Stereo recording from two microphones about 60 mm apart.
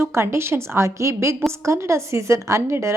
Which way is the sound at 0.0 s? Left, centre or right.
Right.